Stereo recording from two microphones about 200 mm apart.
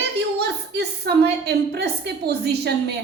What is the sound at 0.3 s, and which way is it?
A woman's voice, 55° right (ahead or behind).